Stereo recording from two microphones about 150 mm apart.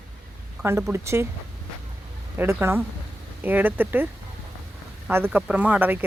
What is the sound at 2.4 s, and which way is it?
Speech, 15° right (ahead or behind).